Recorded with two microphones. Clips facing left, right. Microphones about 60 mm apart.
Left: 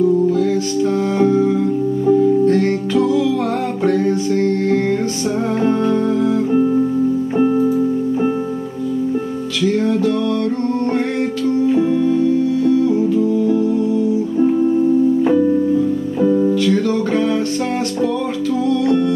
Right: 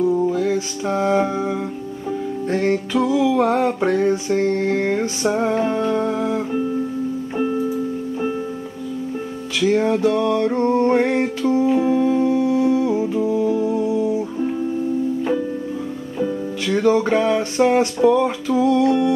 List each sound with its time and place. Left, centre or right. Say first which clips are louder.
0.3 s music: left 4 dB; centre
7.3 s keyboard: left 5 dB; centre
9.6 s music: even; centre
16.2 s music: left 8 dB; centre
16.6 s music: left 1 dB; centre